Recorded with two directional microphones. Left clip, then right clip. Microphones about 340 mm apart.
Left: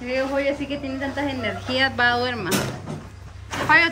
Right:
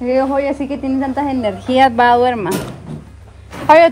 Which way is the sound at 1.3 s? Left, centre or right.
Centre.